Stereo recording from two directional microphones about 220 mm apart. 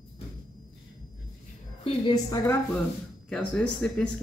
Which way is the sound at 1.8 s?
20° left (ahead or behind).